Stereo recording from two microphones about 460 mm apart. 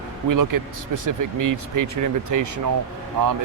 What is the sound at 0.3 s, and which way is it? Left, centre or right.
A man's voice, right.